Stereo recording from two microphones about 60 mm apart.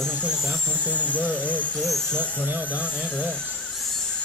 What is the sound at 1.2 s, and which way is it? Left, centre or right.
Speech, right.